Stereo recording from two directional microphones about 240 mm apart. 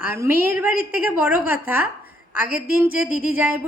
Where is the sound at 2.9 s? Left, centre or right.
Centre.